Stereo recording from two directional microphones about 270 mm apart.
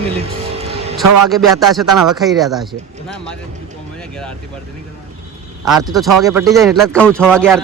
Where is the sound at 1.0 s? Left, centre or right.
Right.